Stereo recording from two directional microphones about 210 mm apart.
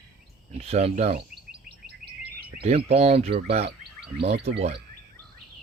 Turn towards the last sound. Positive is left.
turn(degrees=-30)  # may be behind; listen again after turning